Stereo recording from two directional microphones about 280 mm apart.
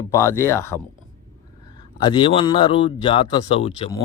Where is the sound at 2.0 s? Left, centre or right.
Centre.